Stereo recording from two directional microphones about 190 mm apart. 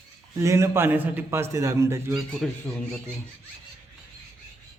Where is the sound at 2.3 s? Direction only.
5° left (ahead or behind).